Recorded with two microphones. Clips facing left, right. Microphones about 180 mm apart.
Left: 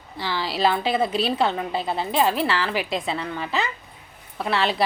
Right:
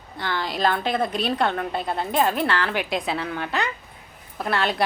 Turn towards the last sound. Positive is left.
turn(degrees=0)  # may be behind; listen again after turning